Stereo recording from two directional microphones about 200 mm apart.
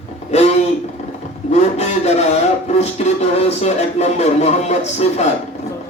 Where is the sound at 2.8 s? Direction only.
35° left (ahead or behind).